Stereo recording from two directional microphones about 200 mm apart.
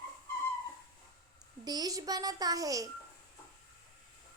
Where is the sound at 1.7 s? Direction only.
20° right (ahead or behind).